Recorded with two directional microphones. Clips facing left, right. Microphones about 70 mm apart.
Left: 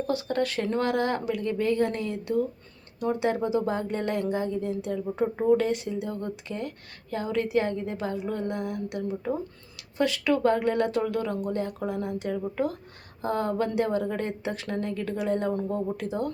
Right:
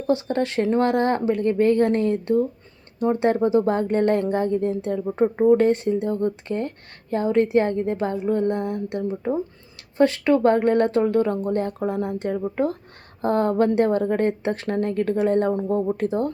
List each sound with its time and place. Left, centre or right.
0.1 s speech: right